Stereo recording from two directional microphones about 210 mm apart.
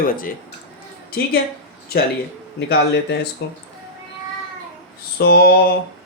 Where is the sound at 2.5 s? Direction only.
55° left (ahead or behind).